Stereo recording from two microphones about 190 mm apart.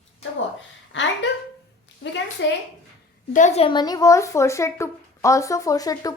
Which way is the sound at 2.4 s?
70° left (ahead or behind).